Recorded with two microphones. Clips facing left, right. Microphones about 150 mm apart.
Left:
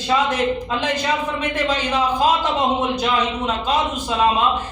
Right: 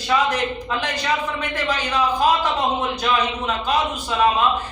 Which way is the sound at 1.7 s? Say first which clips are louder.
Right 1 dB; 20° left (ahead or behind).